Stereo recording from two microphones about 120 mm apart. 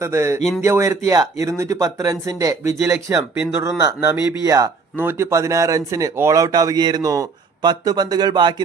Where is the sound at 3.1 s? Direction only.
25° right (ahead or behind).